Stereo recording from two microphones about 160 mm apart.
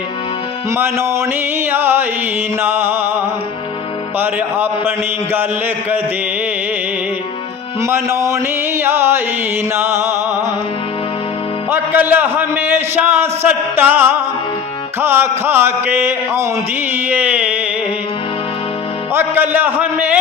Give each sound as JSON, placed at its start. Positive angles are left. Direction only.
{"t": 0.8, "sound": "a man's voice", "side_deg": -15}
{"t": 4.2, "sound": "a man's voice", "side_deg": -15}
{"t": 7.8, "sound": "a man's voice", "side_deg": -15}
{"t": 11.7, "sound": "a man's voice", "side_deg": -10}
{"t": 19.1, "sound": "a man's voice", "side_deg": -10}